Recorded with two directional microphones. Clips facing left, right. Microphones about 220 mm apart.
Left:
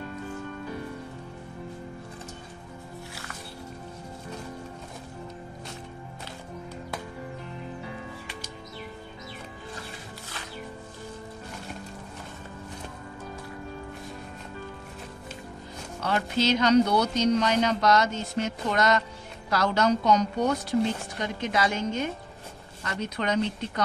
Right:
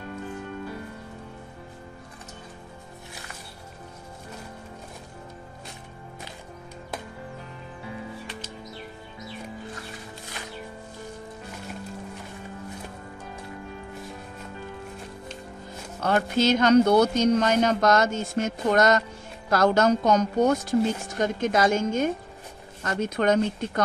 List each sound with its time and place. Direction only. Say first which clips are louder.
16.0 s speech: right 4 dB; 50° right (ahead or behind)